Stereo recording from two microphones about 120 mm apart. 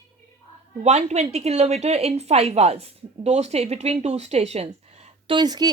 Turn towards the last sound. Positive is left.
turn(degrees=-35)  # may be behind; listen again after turning